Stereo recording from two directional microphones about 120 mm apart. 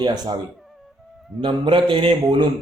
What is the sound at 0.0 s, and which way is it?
Speech, 35° right (ahead or behind).